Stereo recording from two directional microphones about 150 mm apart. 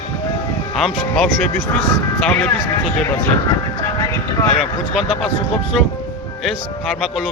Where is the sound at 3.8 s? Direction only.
20° left (ahead or behind).